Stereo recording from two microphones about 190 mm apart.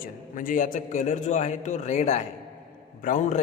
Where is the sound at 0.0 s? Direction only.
45° left (ahead or behind).